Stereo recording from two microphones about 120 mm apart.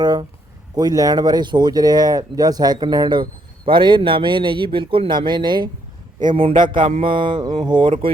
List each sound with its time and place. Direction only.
0.0 s a man's voice: 35° right (ahead or behind)